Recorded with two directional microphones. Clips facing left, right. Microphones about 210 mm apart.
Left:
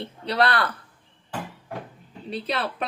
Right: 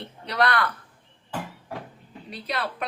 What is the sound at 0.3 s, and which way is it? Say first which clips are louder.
Speech: left 1 dB; 30° left (ahead or behind).